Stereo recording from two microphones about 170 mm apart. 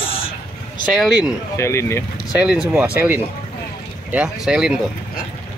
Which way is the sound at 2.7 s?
10° right (ahead or behind).